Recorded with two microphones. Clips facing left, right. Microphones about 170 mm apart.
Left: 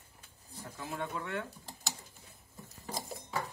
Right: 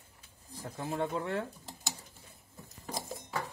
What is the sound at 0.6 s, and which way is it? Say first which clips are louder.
Speech: right 5 dB; 35° right (ahead or behind).